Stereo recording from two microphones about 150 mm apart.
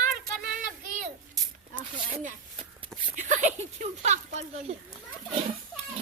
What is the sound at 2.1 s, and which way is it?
Speech, 60° right (ahead or behind).